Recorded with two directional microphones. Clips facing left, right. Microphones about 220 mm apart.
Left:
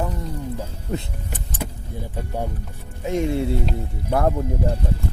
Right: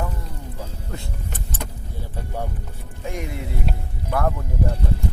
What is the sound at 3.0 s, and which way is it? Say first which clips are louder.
Speech: left 9 dB; 25° left (ahead or behind).